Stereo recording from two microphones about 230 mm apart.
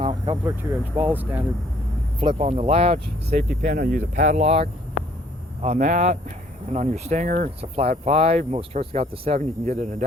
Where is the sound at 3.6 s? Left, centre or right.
Right.